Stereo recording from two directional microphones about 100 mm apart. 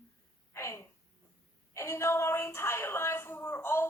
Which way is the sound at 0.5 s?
30° left (ahead or behind).